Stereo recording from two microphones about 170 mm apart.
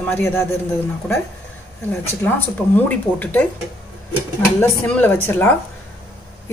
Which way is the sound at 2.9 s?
10° left (ahead or behind).